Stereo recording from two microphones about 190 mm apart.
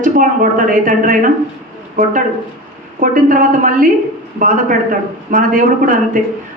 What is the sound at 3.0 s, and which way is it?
Speech, 45° right (ahead or behind).